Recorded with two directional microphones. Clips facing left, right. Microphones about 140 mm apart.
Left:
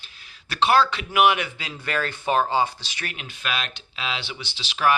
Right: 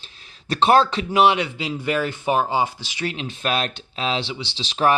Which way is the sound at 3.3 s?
40° right (ahead or behind).